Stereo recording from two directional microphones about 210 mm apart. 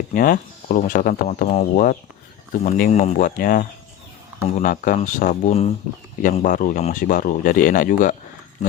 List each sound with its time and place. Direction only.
0.1 s speech: 40° left (ahead or behind)